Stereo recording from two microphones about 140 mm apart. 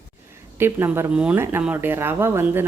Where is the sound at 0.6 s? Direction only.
15° right (ahead or behind).